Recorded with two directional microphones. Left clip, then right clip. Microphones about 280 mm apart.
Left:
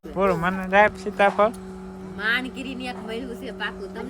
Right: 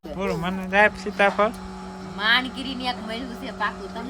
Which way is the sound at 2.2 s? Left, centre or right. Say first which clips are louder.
Right 4 dB; centre.